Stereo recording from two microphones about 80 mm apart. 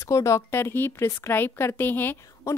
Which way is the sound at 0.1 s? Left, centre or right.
Left.